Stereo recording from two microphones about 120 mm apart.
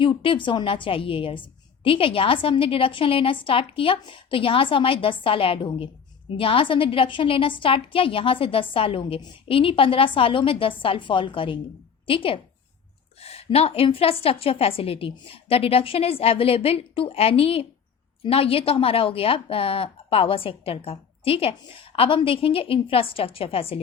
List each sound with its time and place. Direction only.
0.0 s a woman's voice: 45° left (ahead or behind)